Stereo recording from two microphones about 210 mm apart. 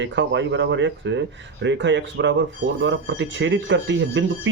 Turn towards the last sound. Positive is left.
turn(degrees=-60)  # may be behind; listen again after turning